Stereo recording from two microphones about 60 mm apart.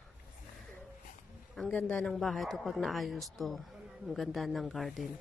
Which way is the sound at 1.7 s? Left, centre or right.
Centre.